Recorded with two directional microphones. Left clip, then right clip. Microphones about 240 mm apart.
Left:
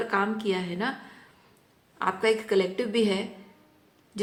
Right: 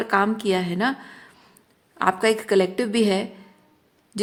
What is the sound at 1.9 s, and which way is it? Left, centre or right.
A woman's voice, right.